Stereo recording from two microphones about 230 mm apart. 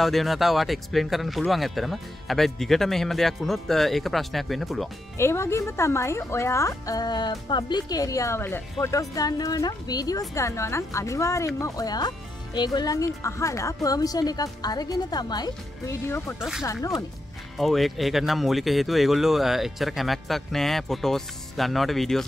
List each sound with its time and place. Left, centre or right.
0.0 s speech: centre
5.1 s speech: centre
16.3 s speech: centre
16.6 s speech: centre
17.6 s speech: centre